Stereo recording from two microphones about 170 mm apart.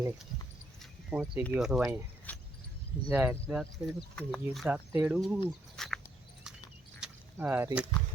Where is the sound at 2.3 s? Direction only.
10° left (ahead or behind).